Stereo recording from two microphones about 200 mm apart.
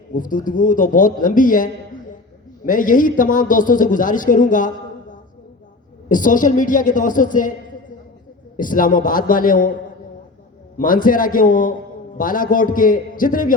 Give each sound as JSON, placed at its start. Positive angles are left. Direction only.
{"t": 0.1, "sound": "a woman's voice", "side_deg": 40}
{"t": 6.1, "sound": "a woman's voice", "side_deg": 40}
{"t": 8.5, "sound": "a man's voice", "side_deg": 45}
{"t": 10.8, "sound": "a man's voice", "side_deg": 45}